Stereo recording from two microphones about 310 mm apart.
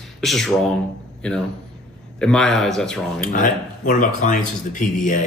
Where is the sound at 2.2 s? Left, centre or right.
Centre.